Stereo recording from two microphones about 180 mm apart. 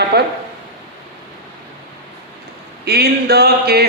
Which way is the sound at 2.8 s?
60° right (ahead or behind).